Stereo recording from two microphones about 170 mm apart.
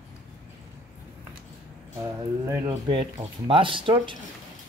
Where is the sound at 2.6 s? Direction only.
30° right (ahead or behind).